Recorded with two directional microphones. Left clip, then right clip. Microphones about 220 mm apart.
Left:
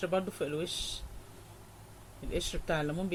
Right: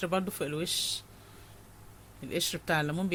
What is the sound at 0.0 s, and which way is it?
Speech, 50° right (ahead or behind).